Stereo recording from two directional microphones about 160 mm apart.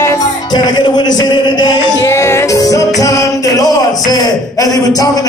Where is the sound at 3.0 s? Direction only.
20° left (ahead or behind).